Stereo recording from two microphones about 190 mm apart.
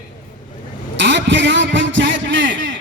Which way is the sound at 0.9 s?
70° right (ahead or behind).